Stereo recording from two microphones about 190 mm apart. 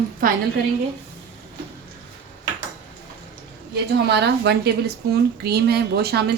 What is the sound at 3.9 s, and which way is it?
Speech, 60° right (ahead or behind).